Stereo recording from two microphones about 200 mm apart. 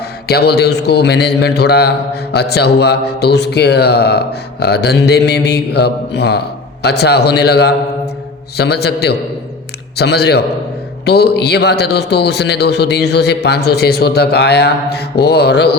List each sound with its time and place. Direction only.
0.3 s speech: 55° left (ahead or behind)